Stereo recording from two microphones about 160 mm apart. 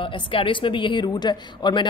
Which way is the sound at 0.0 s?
35° left (ahead or behind).